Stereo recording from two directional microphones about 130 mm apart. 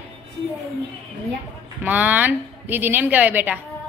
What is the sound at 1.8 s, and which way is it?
A woman's voice, 10° right (ahead or behind).